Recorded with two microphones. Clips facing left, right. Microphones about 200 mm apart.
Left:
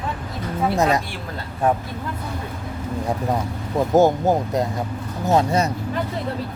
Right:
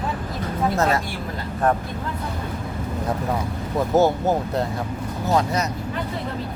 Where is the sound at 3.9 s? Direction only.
15° left (ahead or behind).